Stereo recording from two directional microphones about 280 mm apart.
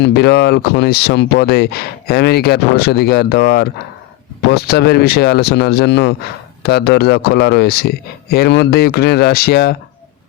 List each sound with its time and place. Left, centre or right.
0.0 s speech: left